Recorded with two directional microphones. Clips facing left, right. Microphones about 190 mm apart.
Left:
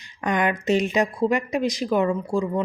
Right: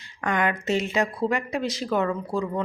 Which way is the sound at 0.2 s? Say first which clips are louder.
Left 2 dB; 20° left (ahead or behind).